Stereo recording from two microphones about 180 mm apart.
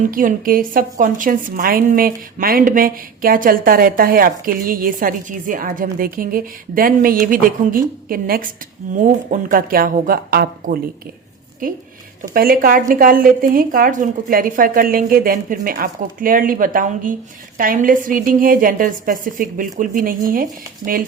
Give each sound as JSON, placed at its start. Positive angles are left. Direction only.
{"t": 0.1, "sound": "a woman's voice", "side_deg": -50}